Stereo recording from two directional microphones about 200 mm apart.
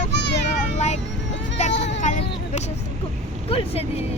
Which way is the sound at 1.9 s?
35° left (ahead or behind).